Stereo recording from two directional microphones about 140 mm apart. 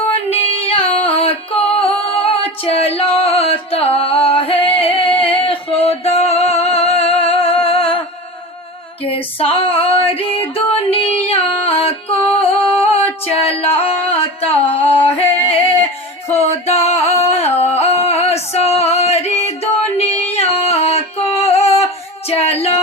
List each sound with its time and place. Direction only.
0.3 s singing: 45° left (ahead or behind)
5.2 s music: 40° left (ahead or behind)
9.0 s female singing: 45° left (ahead or behind)
13.2 s music: 45° left (ahead or behind)
20.0 s a sound: 50° left (ahead or behind)
22.3 s music: 45° left (ahead or behind)